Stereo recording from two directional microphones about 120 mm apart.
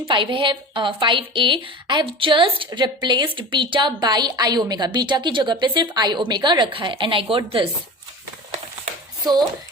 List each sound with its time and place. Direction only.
0.1 s a woman's voice: 45° right (ahead or behind)